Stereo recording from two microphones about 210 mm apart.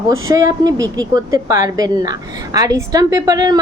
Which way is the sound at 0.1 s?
15° right (ahead or behind).